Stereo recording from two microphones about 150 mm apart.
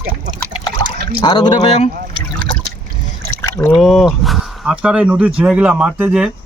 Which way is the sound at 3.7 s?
Centre (ahead or behind).